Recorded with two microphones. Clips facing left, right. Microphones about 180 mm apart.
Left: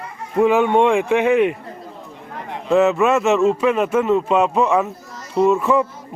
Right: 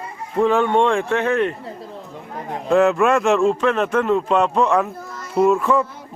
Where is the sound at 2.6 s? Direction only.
Centre (ahead or behind).